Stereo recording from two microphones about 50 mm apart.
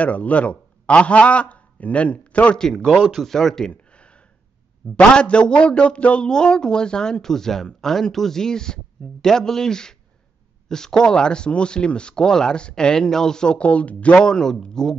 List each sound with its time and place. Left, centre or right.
0.0 s a man's voice: left
2.6 s a man's voice: centre
2.9 s speech: centre
3.7 s a sound: left
4.9 s a man's voice: left
14.1 s a man's voice: centre